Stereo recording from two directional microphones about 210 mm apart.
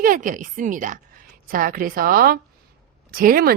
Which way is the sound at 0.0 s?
40° right (ahead or behind).